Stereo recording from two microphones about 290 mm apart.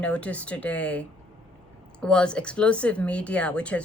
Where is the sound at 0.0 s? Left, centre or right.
Centre.